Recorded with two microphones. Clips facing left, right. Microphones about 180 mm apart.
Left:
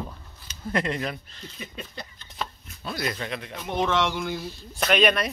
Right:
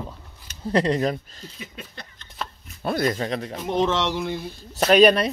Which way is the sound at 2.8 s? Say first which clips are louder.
Right 8 dB; 55° right (ahead or behind).